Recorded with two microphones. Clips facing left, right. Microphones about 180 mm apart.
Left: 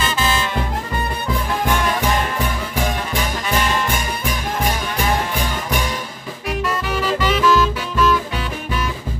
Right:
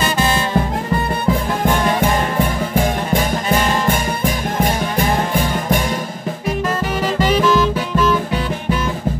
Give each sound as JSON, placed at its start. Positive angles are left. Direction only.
{"t": 0.0, "sound": "music", "side_deg": -40}
{"t": 2.3, "sound": "music", "side_deg": -55}
{"t": 7.0, "sound": "saxophone", "side_deg": -40}